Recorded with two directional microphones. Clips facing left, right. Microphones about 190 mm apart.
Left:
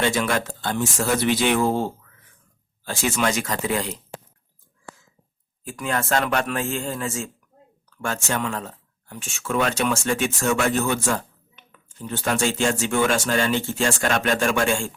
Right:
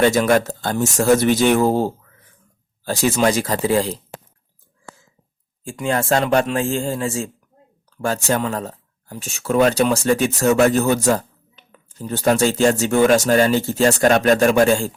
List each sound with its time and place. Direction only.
0.0 s speech: 40° right (ahead or behind)
5.6 s speech: 30° right (ahead or behind)